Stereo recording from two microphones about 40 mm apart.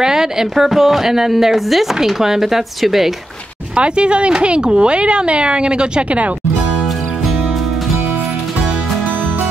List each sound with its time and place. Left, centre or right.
0.0 s speech: centre
3.7 s speech: right